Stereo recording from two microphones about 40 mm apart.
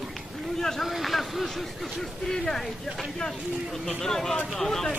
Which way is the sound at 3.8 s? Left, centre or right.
Centre.